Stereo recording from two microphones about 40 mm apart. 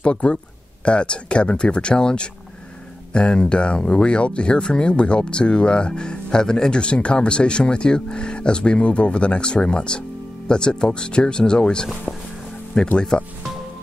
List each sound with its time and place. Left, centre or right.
0.0 s speech: left
6.8 s speech: left